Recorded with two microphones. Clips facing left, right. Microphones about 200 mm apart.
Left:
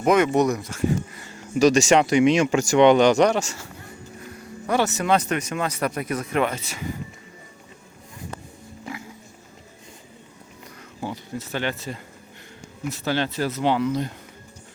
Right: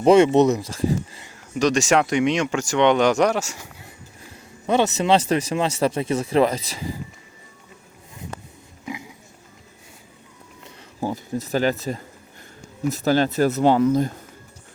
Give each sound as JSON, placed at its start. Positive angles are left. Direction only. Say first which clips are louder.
{"t": 0.0, "sound": "speech", "louder": "right 4 dB", "side_deg": -30}
{"t": 0.7, "sound": "a sound", "louder": "right 1 dB", "side_deg": -35}
{"t": 1.4, "sound": "speech", "louder": "left 3 dB", "side_deg": 5}
{"t": 4.6, "sound": "speech", "louder": "right 3 dB", "side_deg": -20}
{"t": 8.9, "sound": "vehicle", "louder": "right 3 dB", "side_deg": -15}
{"t": 11.0, "sound": "speech", "louder": "right 5 dB", "side_deg": -40}